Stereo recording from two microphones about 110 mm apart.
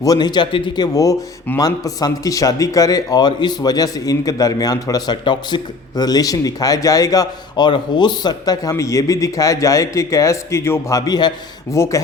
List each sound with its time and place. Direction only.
0.0 s speech: 35° left (ahead or behind)
1.5 s speech: 35° left (ahead or behind)